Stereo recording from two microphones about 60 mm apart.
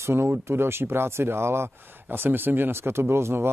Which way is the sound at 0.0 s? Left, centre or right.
Right.